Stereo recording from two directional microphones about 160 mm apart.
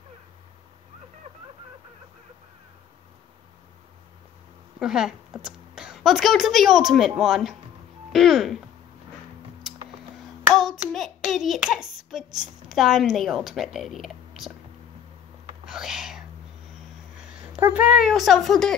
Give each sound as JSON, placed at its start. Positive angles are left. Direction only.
{"t": 1.3, "sound": "a sound", "side_deg": -35}
{"t": 4.7, "sound": "a child's voice", "side_deg": -5}
{"t": 10.5, "sound": "hands", "side_deg": 0}
{"t": 15.6, "sound": "whispering", "side_deg": -5}
{"t": 17.2, "sound": "a sound", "side_deg": -5}
{"t": 17.6, "sound": "a child's voice", "side_deg": -10}